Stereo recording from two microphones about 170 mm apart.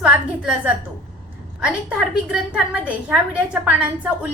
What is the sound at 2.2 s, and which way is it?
A woman's voice, 5° right (ahead or behind).